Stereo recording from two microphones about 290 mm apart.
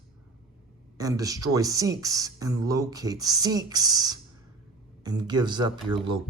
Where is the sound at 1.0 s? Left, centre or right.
Centre.